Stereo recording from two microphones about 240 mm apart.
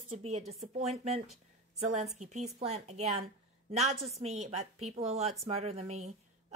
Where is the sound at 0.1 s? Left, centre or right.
Right.